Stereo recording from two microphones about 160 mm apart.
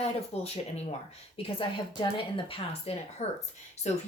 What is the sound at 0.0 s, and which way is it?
Speech, 40° left (ahead or behind).